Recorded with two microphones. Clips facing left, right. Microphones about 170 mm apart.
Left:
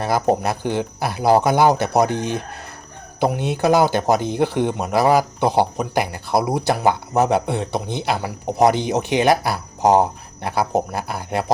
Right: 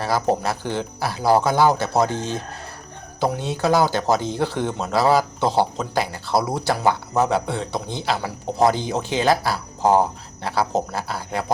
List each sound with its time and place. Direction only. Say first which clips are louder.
0.0 s a man's voice: left 2 dB; 20° left (ahead or behind)